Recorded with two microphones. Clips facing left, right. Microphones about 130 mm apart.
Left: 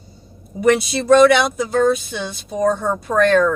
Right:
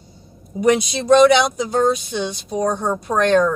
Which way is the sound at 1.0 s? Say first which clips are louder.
Even; 20° right (ahead or behind).